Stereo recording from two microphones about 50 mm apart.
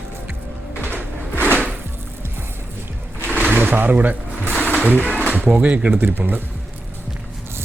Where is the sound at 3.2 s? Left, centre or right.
Right.